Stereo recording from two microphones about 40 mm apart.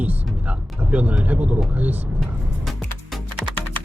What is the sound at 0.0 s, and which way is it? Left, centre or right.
Music, right.